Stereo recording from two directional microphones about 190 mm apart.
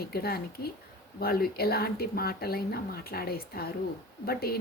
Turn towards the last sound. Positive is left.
turn(degrees=55)  # may be behind; listen again after turning